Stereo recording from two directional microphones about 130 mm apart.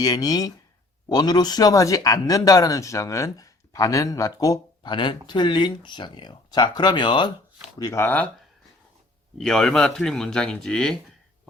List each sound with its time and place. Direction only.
0.0 s speech: 30° left (ahead or behind)
7.8 s speech: 25° left (ahead or behind)
9.4 s speech: 5° left (ahead or behind)